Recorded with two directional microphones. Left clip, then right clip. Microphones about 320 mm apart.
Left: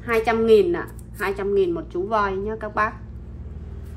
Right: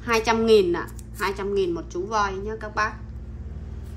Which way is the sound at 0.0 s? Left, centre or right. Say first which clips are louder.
Left 1 dB; centre.